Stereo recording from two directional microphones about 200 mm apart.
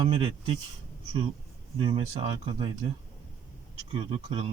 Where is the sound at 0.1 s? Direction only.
25° right (ahead or behind).